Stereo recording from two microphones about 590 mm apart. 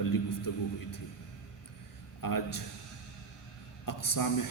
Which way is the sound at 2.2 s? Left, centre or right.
Left.